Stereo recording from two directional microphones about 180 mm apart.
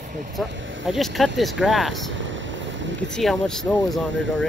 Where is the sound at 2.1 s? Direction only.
90° right.